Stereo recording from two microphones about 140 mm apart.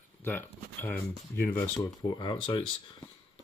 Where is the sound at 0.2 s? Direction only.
15° left (ahead or behind).